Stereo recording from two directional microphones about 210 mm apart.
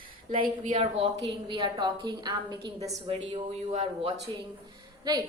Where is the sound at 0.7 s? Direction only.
25° right (ahead or behind).